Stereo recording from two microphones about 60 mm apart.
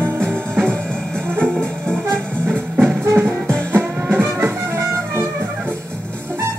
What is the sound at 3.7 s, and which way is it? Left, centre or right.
Music, right.